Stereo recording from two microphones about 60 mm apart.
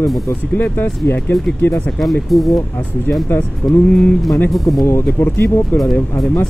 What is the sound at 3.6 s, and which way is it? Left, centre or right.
Speech, left.